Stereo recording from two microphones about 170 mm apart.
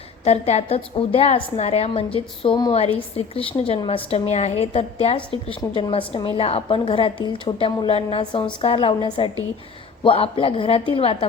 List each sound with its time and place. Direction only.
0.3 s a woman's voice: 35° left (ahead or behind)